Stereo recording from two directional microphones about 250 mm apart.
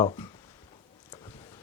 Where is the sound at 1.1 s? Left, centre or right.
Centre.